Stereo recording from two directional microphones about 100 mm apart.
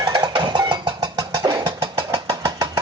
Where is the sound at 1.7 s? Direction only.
45° right (ahead or behind).